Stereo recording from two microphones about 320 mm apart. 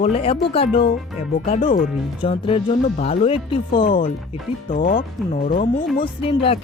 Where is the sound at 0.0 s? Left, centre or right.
Centre.